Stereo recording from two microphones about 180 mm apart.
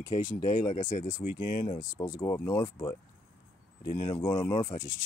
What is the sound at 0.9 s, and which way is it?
Speech, 55° left (ahead or behind).